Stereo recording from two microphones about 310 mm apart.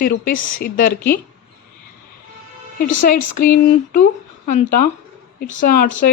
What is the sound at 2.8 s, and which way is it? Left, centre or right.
A woman's voice, left.